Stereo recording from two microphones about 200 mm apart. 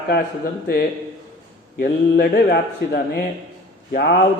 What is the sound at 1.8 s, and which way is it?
A man's voice, 50° left (ahead or behind).